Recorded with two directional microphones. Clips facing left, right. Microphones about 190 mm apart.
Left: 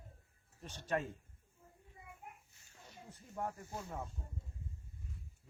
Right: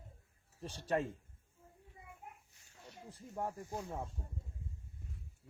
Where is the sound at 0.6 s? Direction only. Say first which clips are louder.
Right 3 dB; 30° right (ahead or behind).